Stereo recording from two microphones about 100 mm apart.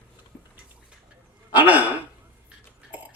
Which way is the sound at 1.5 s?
15° right (ahead or behind).